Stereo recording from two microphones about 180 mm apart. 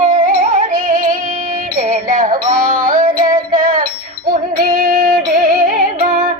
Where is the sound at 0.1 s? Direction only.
45° right (ahead or behind).